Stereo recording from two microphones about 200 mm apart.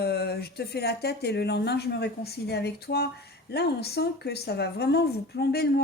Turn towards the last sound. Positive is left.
turn(degrees=55)  # may be behind; listen again after turning